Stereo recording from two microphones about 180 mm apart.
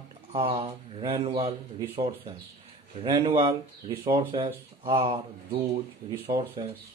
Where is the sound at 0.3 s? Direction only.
30° right (ahead or behind).